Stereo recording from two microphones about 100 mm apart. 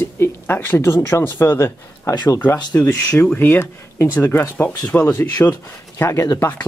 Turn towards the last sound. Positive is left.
turn(degrees=15)  # may be behind; listen again after turning